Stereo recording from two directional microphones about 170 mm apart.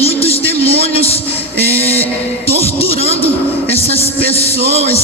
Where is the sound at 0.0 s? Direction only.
35° left (ahead or behind).